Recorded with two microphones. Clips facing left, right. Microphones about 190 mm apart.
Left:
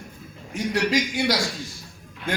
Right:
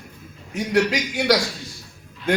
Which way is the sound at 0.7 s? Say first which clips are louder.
Right 3 dB; 65° right (ahead or behind).